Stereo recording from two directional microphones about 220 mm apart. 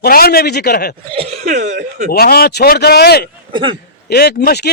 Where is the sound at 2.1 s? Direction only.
45° left (ahead or behind).